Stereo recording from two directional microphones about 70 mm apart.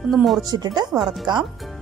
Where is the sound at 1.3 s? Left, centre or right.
Right.